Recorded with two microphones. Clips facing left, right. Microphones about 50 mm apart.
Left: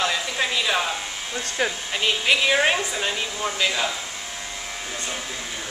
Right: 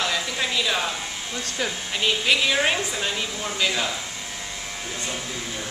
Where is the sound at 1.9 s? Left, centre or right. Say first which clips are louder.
Right 1 dB; centre.